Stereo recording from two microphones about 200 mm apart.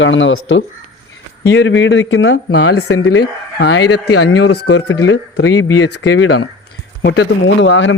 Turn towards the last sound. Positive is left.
turn(degrees=70)  # may be behind; listen again after turning